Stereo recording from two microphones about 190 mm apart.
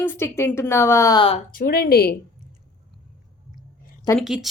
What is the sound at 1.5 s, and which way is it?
Speech, 50° left (ahead or behind).